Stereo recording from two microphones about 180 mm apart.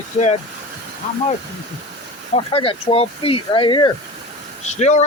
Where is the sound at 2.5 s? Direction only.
30° left (ahead or behind).